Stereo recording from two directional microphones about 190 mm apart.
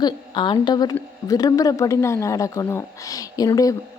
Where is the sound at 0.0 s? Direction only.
25° left (ahead or behind).